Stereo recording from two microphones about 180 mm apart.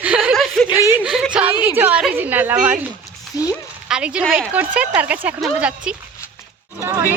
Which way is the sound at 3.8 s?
5° right (ahead or behind).